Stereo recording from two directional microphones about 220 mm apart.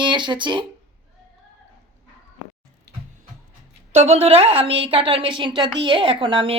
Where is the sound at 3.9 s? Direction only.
30° right (ahead or behind).